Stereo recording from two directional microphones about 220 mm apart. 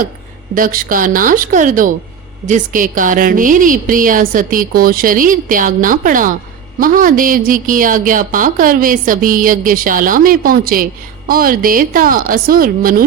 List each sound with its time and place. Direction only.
0.5 s a woman's voice: 40° right (ahead or behind)